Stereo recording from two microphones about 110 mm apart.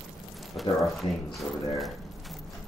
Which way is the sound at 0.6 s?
Centre (ahead or behind).